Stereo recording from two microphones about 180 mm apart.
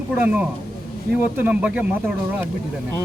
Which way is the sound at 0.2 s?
10° right (ahead or behind).